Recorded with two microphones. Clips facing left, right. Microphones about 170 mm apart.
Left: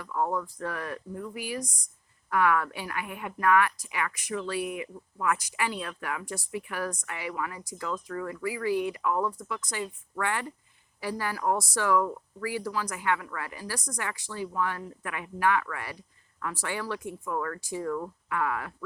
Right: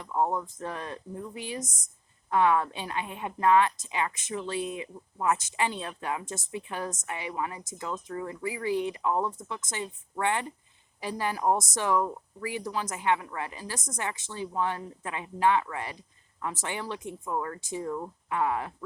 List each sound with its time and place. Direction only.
0.0 s a woman's voice: 25° right (ahead or behind)